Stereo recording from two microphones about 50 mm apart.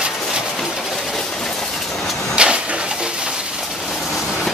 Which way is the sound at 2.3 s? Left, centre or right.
Right.